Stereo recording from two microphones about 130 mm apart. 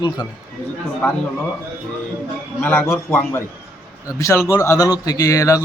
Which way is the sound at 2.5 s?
15° left (ahead or behind).